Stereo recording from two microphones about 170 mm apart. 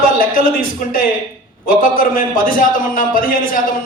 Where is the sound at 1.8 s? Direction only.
55° left (ahead or behind).